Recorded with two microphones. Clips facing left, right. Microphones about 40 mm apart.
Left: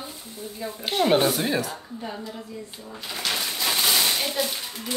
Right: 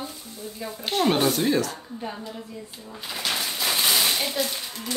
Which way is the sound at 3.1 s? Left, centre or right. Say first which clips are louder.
Even; centre.